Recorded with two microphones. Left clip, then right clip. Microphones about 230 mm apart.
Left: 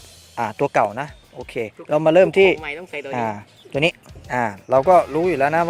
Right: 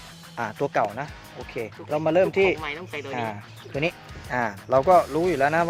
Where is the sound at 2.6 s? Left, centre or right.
Centre.